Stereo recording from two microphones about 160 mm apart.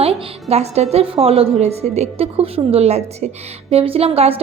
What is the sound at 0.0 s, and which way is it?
A woman's voice, 40° right (ahead or behind).